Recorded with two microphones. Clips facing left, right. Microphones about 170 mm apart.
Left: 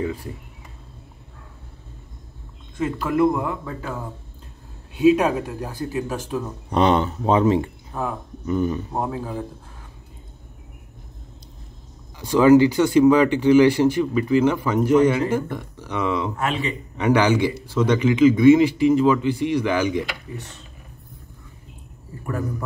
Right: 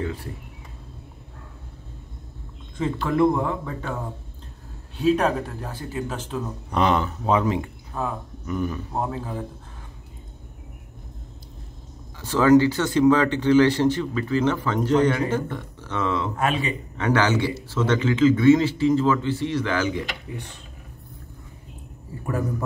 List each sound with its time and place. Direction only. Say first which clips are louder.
0.0 s speech: left 3 dB; 10° left (ahead or behind)
2.8 s speech: left 1 dB; 5° left (ahead or behind)
4.9 s speech: left 4 dB; 10° left (ahead or behind)
6.7 s a man's voice: left 3 dB; 30° left (ahead or behind)
9.0 s speech: left 2 dB; 10° left (ahead or behind)
12.2 s speech: left 3 dB; 15° left (ahead or behind)
16.3 s a man's voice: right 1 dB; 15° right (ahead or behind)
16.9 s speech: left 4 dB; 15° left (ahead or behind)